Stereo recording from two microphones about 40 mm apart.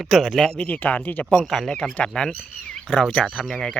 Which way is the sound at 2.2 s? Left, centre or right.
Left.